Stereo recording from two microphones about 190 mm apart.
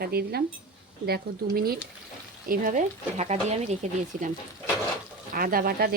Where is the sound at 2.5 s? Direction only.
45° right (ahead or behind).